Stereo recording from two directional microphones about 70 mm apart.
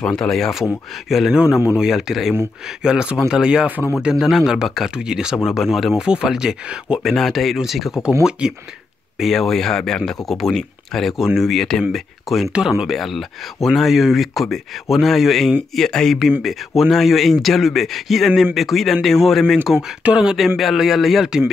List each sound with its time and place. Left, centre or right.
0.0 s speech: centre
7.0 s speech: centre
9.2 s speech: centre
12.9 s speech: centre
20.0 s speech: centre
20.3 s speech: centre